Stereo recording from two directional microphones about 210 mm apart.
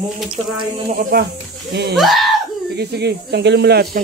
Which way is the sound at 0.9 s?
45° right (ahead or behind).